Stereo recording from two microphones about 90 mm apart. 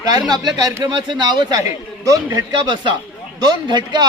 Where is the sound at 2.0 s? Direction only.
40° right (ahead or behind).